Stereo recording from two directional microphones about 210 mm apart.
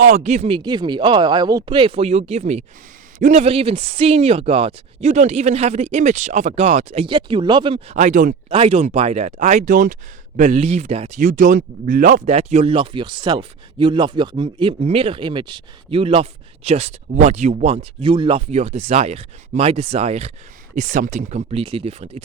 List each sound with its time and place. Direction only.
0.0 s speech: 35° right (ahead or behind)
8.4 s speech: 30° right (ahead or behind)